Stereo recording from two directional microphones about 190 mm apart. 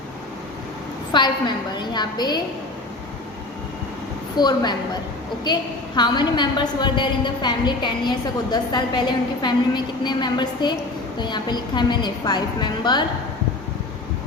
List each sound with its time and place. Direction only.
1.1 s a woman's voice: 25° left (ahead or behind)
4.4 s a woman's voice: 20° left (ahead or behind)
6.0 s a woman's voice: 25° left (ahead or behind)